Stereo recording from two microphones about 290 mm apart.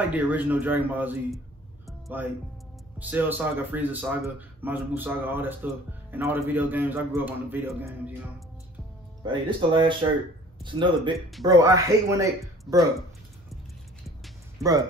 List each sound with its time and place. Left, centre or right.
0.1 s a man's voice: centre
1.9 s music: centre
3.0 s speech: centre
11.1 s a man's voice: centre
11.4 s speech: centre
14.6 s speech: centre